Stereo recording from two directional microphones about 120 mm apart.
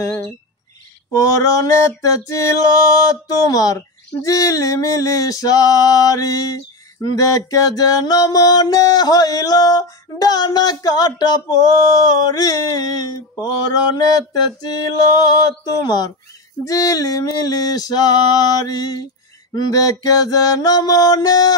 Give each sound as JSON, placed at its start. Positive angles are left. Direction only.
{"t": 1.1, "sound": "mantra", "side_deg": 30}